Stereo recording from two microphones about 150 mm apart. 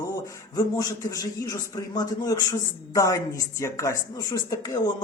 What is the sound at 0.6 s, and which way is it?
Speech, 20° left (ahead or behind).